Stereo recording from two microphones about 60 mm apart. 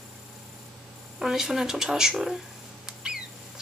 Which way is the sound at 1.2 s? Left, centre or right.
Centre.